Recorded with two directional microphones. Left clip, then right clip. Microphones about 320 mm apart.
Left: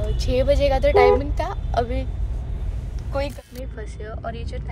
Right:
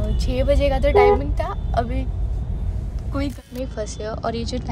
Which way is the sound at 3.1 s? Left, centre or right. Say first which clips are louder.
Even; centre.